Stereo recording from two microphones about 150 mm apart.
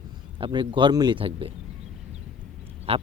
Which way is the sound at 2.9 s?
40° right (ahead or behind).